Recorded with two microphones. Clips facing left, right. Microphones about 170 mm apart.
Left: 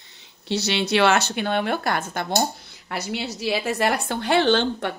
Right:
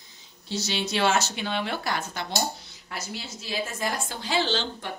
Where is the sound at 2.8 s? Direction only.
70° left (ahead or behind).